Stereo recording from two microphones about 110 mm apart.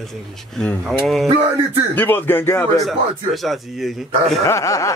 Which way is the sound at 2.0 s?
15° left (ahead or behind).